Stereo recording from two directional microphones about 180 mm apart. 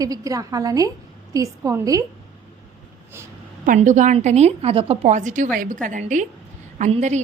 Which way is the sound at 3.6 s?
45° right (ahead or behind).